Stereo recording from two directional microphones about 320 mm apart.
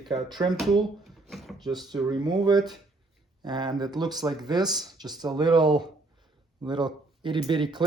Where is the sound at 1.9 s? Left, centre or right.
Centre.